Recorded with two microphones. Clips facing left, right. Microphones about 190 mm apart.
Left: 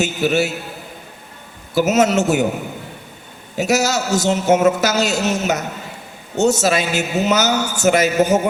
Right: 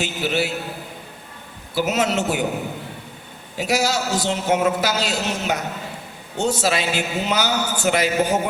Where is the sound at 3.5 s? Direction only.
45° left (ahead or behind).